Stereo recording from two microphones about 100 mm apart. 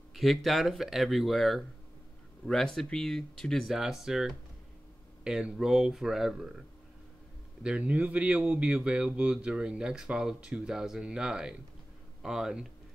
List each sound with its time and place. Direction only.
0.1 s speech: centre (ahead or behind)
7.6 s speech: 10° right (ahead or behind)